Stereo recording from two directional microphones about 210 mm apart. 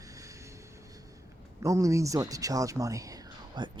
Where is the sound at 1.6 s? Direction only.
15° right (ahead or behind).